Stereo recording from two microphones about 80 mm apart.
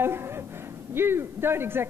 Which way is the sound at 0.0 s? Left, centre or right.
Right.